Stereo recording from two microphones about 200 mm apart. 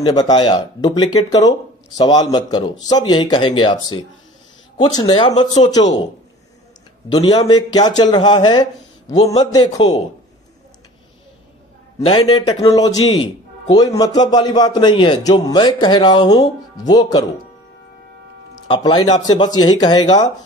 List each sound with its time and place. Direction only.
0.0 s a man's voice: 20° left (ahead or behind)
7.1 s a man's voice: 20° left (ahead or behind)
12.0 s a man's voice: 25° left (ahead or behind)
18.7 s a man's voice: 20° left (ahead or behind)